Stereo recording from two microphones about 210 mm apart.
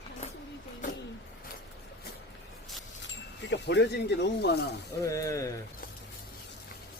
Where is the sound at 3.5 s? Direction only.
55° left (ahead or behind).